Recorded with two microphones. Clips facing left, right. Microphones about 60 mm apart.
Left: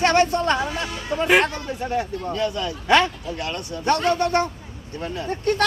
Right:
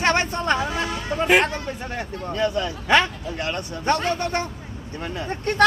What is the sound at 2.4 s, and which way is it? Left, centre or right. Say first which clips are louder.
Speech: right 3 dB; right.